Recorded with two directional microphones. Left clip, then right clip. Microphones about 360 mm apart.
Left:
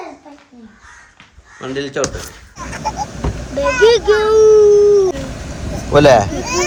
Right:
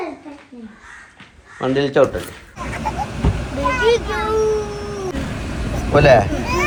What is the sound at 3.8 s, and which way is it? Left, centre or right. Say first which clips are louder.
Speech: left 9 dB; left.